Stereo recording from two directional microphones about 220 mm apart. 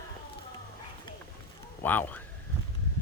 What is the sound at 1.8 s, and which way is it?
Speech, 10° left (ahead or behind).